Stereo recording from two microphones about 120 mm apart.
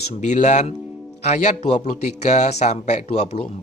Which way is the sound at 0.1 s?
85° left.